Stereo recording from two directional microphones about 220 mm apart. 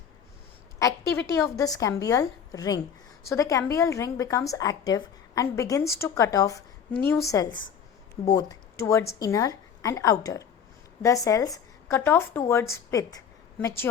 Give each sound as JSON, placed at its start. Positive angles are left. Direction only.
{"t": 1.4, "sound": "a woman's voice", "side_deg": 15}